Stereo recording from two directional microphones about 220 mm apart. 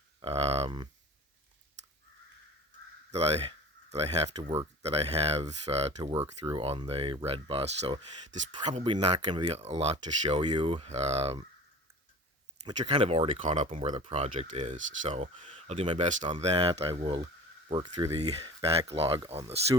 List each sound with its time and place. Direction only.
0.2 s a sound: 25° right (ahead or behind)
3.1 s speech: 30° right (ahead or behind)
12.6 s speech: 25° right (ahead or behind)